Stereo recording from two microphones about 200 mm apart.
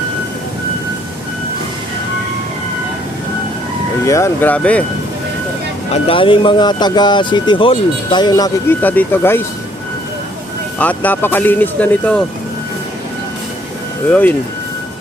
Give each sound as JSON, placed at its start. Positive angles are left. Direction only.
{"t": 4.0, "sound": "speech", "side_deg": 15}
{"t": 5.9, "sound": "speech", "side_deg": 25}
{"t": 8.8, "sound": "speech", "side_deg": 10}
{"t": 10.8, "sound": "speech", "side_deg": 10}
{"t": 14.1, "sound": "speech", "side_deg": 10}